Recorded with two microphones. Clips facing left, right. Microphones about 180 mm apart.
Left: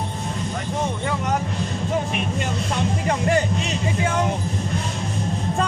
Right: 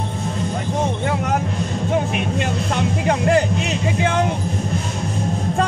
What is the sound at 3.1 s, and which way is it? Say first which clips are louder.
Speech: right 4 dB; 65° right (ahead or behind).